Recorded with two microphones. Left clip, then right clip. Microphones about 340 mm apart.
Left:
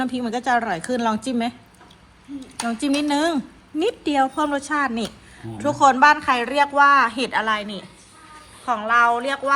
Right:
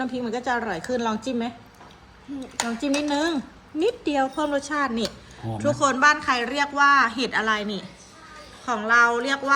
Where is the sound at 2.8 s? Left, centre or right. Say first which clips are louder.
Left 4 dB; left.